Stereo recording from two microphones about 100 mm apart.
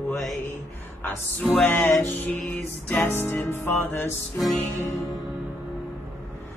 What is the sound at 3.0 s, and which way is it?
Music, 20° left (ahead or behind).